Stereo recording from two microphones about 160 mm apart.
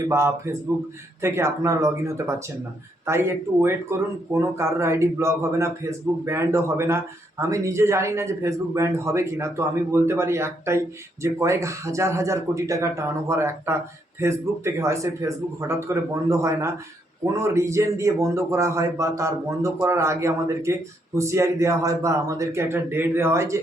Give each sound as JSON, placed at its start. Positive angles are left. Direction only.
{"t": 0.1, "sound": "speech", "side_deg": -15}